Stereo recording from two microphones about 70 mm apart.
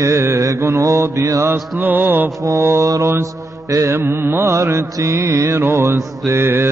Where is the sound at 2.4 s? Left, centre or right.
Right.